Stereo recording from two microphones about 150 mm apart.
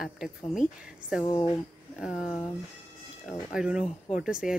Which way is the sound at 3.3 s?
5° right (ahead or behind).